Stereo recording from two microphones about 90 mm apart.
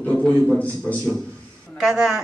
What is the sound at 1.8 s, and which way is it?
Speech, 5° right (ahead or behind).